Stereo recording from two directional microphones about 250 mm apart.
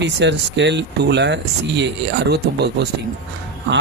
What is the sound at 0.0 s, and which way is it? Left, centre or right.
Speech, right.